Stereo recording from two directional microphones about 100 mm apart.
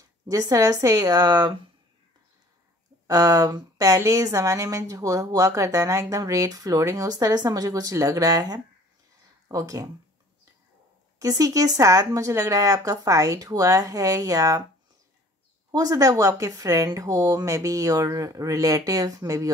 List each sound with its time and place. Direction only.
0.0 s a woman's voice: 35° right (ahead or behind)
3.1 s a woman's voice: 35° right (ahead or behind)
11.1 s a woman's voice: 35° right (ahead or behind)
15.7 s a woman's voice: 40° right (ahead or behind)